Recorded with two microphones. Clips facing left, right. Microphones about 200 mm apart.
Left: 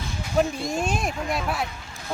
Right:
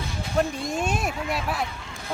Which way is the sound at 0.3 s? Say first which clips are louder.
Left 2 dB; centre (ahead or behind).